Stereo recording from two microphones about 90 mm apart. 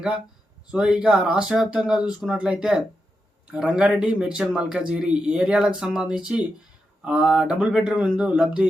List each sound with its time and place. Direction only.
0.7 s a man's voice: 10° right (ahead or behind)